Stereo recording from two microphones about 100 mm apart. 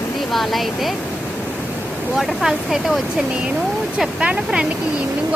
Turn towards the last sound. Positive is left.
turn(degrees=-10)  # may be behind; listen again after turning